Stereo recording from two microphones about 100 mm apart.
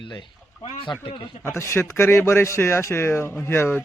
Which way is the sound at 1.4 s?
25° left (ahead or behind).